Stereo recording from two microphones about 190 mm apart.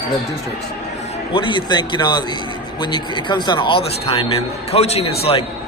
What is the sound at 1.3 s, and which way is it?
A man's voice, 25° left (ahead or behind).